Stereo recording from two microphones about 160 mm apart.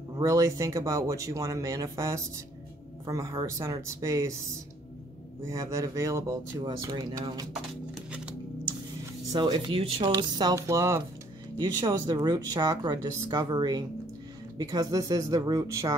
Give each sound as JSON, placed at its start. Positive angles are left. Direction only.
{"t": 0.2, "sound": "speech", "side_deg": -20}
{"t": 5.4, "sound": "speech", "side_deg": -20}
{"t": 7.9, "sound": "music", "side_deg": -5}
{"t": 9.3, "sound": "speech", "side_deg": -30}